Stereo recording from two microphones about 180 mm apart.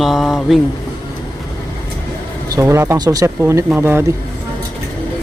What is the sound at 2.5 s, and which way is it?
Speech, 15° right (ahead or behind).